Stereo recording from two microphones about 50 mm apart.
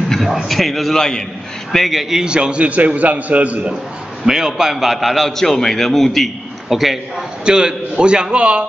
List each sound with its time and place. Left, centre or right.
0.1 s a man's voice: centre
0.9 s a man's voice: centre
1.7 s a man's voice: centre
2.2 s a man's voice: centre
4.3 s a man's voice: centre
7.4 s a man's voice: centre